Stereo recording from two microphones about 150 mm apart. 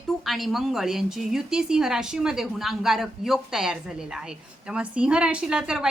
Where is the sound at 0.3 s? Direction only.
Centre (ahead or behind).